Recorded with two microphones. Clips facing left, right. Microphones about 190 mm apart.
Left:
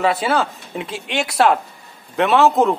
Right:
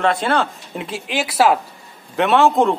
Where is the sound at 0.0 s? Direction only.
5° left (ahead or behind).